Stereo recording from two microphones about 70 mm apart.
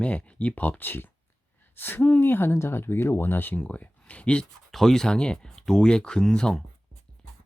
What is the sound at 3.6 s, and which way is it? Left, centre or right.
Speech, centre.